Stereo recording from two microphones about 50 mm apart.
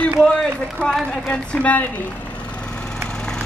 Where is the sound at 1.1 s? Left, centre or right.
Left.